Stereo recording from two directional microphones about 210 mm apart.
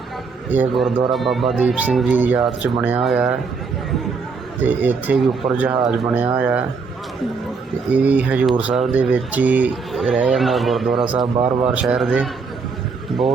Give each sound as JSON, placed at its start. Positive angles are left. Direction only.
{"t": 0.5, "sound": "speech", "side_deg": -5}
{"t": 4.6, "sound": "speech", "side_deg": -10}
{"t": 7.9, "sound": "speech", "side_deg": -5}